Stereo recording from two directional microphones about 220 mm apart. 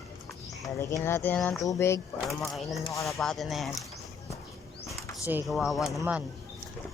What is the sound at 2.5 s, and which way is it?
Speech, centre (ahead or behind).